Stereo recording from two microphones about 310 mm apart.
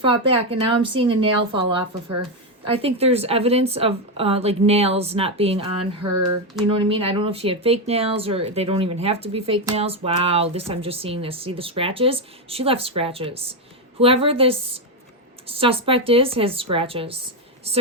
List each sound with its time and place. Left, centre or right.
0.0 s speech: centre